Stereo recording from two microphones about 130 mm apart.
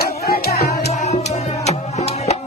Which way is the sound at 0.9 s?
65° left (ahead or behind).